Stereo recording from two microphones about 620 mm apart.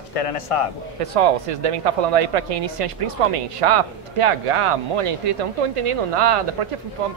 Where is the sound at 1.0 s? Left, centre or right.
Right.